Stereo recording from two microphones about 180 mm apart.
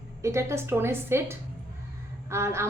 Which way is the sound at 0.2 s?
15° right (ahead or behind).